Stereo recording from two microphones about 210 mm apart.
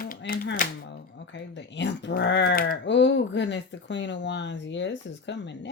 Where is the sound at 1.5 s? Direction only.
60° left (ahead or behind).